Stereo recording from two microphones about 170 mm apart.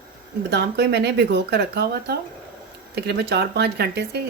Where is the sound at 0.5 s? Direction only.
75° right (ahead or behind).